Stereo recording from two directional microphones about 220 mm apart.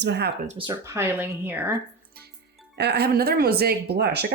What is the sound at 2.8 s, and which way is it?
Speech, 45° right (ahead or behind).